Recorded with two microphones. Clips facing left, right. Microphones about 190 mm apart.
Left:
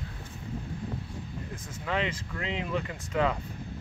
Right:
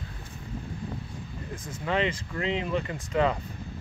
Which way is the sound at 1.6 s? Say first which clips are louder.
Right 4 dB; 5° left (ahead or behind).